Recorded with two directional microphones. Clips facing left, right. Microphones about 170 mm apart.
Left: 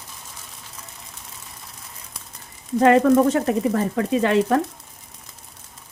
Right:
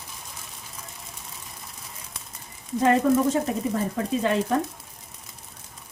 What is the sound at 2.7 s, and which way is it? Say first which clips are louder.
Speech: left 5 dB; 70° left (ahead or behind).